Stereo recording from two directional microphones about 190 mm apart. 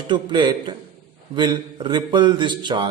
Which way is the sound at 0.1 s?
25° right (ahead or behind).